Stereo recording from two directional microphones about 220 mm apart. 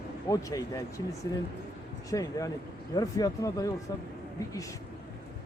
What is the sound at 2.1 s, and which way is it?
Speech, 15° left (ahead or behind).